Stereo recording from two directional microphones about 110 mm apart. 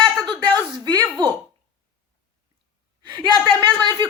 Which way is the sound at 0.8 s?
35° right (ahead or behind).